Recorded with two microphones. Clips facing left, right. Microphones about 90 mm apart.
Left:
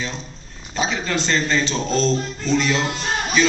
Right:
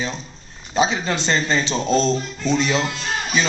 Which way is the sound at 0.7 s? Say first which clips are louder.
Right 3 dB; 25° right (ahead or behind).